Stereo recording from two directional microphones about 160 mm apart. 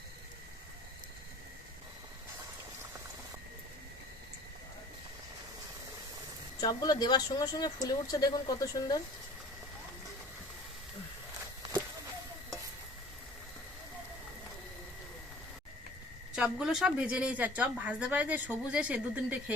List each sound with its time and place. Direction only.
6.6 s speech: 25° left (ahead or behind)
16.3 s a woman's voice: 5° right (ahead or behind)